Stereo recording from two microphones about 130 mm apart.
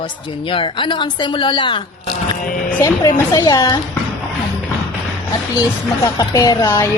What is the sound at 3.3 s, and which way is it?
Speech, 30° left (ahead or behind).